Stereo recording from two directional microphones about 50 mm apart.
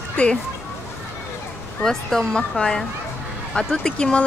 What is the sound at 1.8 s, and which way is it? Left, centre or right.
Speech, centre.